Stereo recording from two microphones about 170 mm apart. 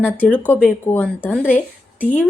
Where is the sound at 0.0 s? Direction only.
10° left (ahead or behind).